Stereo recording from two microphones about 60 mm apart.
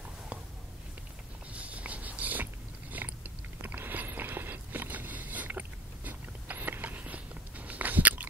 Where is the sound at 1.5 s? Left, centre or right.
Right.